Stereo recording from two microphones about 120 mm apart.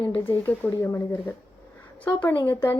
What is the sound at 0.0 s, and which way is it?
A woman's voice, 15° left (ahead or behind).